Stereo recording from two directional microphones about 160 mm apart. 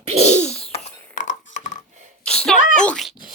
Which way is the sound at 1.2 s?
50° left (ahead or behind).